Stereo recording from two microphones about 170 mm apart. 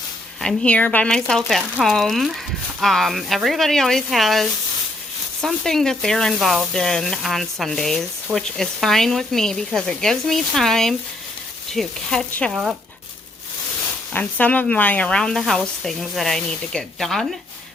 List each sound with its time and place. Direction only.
0.4 s speech: 5° left (ahead or behind)
14.1 s speech: 10° left (ahead or behind)